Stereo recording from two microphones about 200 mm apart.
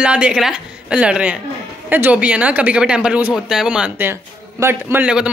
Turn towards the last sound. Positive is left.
turn(degrees=-5)  # may be behind; listen again after turning